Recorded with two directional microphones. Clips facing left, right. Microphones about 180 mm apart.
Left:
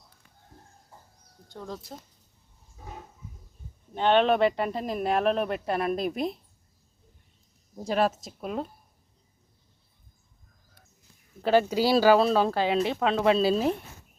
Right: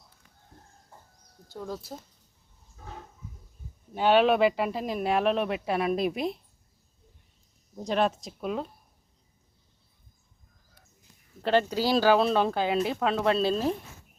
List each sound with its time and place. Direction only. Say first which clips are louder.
1.5 s speech: right 2 dB; 5° right (ahead or behind)
2.7 s wild animals: left 1 dB; 10° left (ahead or behind)
3.9 s speech: even; 5° right (ahead or behind)
7.8 s speech: left 1 dB; 5° left (ahead or behind)
11.4 s speech: left 2 dB; 5° left (ahead or behind)